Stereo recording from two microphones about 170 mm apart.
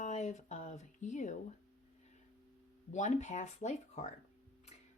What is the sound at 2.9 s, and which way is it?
Speech, 45° left (ahead or behind).